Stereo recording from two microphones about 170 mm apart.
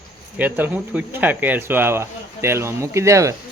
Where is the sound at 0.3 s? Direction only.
10° right (ahead or behind).